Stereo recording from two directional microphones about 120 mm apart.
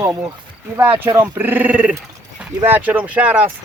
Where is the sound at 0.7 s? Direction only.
20° right (ahead or behind).